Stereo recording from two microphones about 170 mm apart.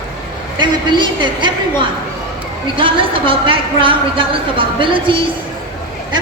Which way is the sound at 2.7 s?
30° right (ahead or behind).